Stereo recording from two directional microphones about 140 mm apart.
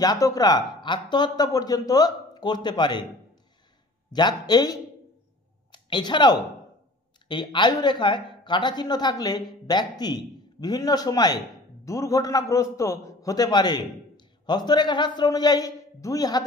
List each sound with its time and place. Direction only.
0.0 s speech: 25° left (ahead or behind)
4.1 s speech: 30° left (ahead or behind)